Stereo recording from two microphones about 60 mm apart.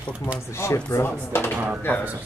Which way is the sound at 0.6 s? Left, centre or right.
Left.